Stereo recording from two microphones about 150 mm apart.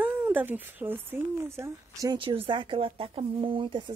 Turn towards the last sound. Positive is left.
turn(degrees=-35)  # may be behind; listen again after turning